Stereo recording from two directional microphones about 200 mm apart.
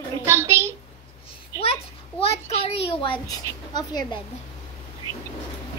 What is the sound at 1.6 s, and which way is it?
A child's voice, 30° left (ahead or behind).